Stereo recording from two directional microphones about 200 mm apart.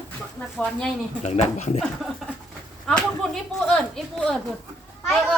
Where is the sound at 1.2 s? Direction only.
35° left (ahead or behind).